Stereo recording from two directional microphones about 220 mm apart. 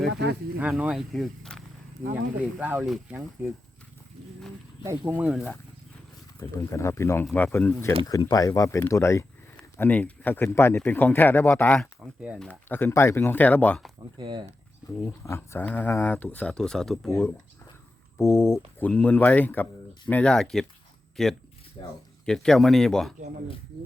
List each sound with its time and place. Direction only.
0.1 s speech: 50° right (ahead or behind)
0.6 s speech: 5° right (ahead or behind)
4.8 s speech: 10° right (ahead or behind)
6.4 s speech: 15° left (ahead or behind)
12.2 s speech: 5° right (ahead or behind)
12.5 s speech: 10° left (ahead or behind)
14.2 s speech: 20° right (ahead or behind)
14.8 s speech: 10° left (ahead or behind)
18.2 s speech: 10° left (ahead or behind)
21.8 s speech: 20° left (ahead or behind)
22.3 s speech: centre (ahead or behind)